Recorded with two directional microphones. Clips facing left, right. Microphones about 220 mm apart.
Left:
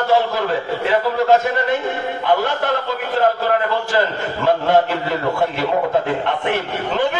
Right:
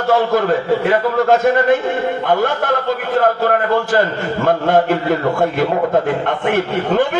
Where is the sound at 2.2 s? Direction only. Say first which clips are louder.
Left 2 dB; 50° right (ahead or behind).